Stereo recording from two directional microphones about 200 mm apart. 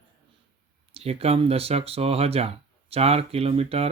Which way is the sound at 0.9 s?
30° right (ahead or behind).